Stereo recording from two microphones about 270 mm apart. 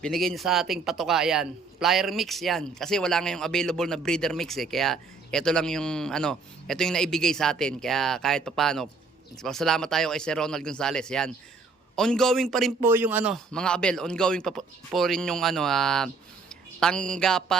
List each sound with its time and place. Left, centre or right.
0.0 s a man's voice: centre